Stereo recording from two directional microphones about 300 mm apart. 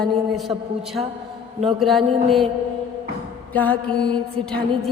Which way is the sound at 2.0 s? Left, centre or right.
Centre.